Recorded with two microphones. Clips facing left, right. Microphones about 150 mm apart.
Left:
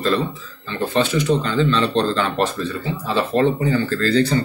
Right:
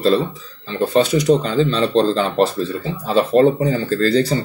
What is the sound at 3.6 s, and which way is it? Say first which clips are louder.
Speech: right 2 dB; 40° right (ahead or behind).